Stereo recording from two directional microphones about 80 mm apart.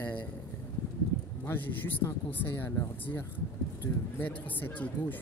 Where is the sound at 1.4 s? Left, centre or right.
Left.